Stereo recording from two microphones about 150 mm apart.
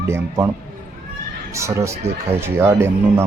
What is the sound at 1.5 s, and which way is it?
Speech, 20° right (ahead or behind).